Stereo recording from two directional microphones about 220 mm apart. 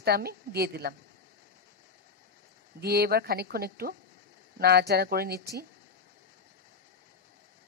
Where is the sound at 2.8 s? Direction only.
45° right (ahead or behind).